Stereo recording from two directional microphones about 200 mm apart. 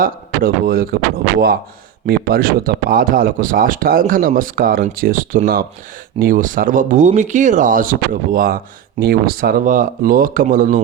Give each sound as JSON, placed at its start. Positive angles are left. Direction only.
{"t": 0.0, "sound": "a man's voice", "side_deg": -45}
{"t": 2.0, "sound": "speech", "side_deg": -50}